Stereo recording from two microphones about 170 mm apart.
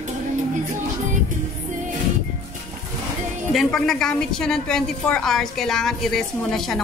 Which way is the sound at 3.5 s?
Centre (ahead or behind).